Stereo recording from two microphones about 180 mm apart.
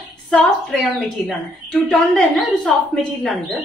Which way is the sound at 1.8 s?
5° left (ahead or behind).